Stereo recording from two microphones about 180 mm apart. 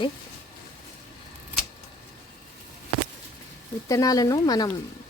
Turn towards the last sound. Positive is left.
turn(degrees=20)  # may be behind; listen again after turning